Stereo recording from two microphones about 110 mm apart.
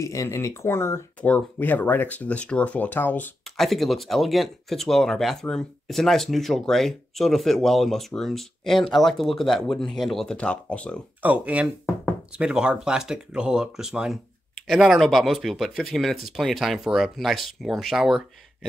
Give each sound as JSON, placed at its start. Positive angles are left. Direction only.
{"t": 0.0, "sound": "speech", "side_deg": 30}
{"t": 3.5, "sound": "speech", "side_deg": 0}
{"t": 11.2, "sound": "speech", "side_deg": -15}